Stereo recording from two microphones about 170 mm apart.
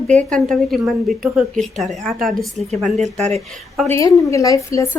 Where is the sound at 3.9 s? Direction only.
20° left (ahead or behind).